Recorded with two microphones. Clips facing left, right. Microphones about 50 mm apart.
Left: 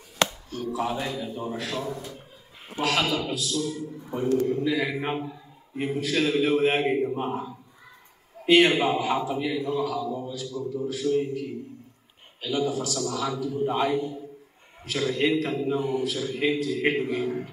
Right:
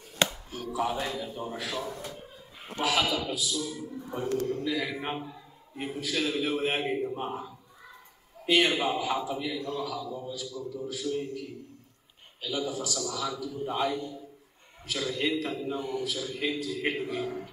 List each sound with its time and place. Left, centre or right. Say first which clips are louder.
0.5 s a man's voice: left 2 dB; centre
2.8 s a man's voice: left 2 dB; left
4.4 s speech: left 5 dB; centre
5.8 s a man's voice: left 6 dB; left; by 10.3 s centre
10.6 s a man's voice: left 8 dB; left
13.6 s speech: left 5 dB; left
14.9 s a man's voice: left 5 dB; left
15.6 s speech: left 6 dB; centre
16.0 s a man's voice: left 5 dB; left